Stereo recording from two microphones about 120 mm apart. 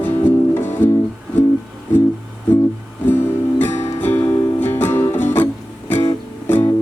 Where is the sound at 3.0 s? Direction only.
15° left (ahead or behind).